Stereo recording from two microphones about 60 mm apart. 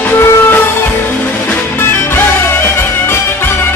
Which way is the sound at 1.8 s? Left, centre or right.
Left.